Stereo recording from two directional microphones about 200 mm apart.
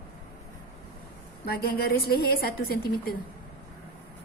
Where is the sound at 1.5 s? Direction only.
50° left (ahead or behind).